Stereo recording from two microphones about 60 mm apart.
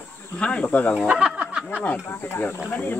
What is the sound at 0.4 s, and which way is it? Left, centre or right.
Speech, centre.